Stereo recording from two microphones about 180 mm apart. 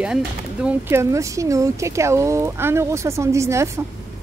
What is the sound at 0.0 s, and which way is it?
A woman's voice, 5° right (ahead or behind).